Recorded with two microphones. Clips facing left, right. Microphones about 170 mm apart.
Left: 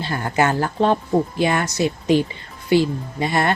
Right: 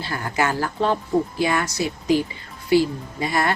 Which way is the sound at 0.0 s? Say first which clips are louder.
Left 4 dB; 25° left (ahead or behind).